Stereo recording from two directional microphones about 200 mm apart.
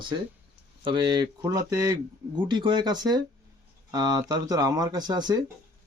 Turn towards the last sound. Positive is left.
turn(degrees=-20)  # may be behind; listen again after turning